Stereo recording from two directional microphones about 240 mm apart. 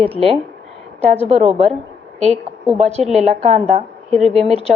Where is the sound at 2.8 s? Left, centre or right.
Right.